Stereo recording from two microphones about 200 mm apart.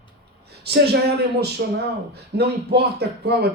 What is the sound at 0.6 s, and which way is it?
A man's voice, 55° right (ahead or behind).